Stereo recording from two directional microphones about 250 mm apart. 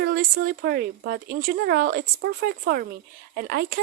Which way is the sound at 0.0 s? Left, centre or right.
Right.